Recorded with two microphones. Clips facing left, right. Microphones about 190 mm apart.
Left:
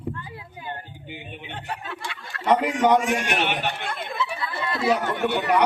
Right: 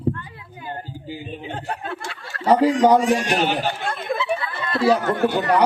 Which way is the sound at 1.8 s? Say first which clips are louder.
Right 4 dB; 40° right (ahead or behind).